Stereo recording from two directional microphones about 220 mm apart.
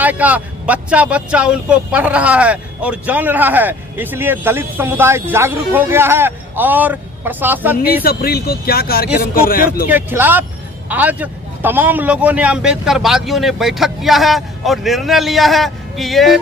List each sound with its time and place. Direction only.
0.0 s speech: 5° right (ahead or behind)
8.0 s speech: 45° left (ahead or behind)
9.9 s a man's voice: 10° right (ahead or behind)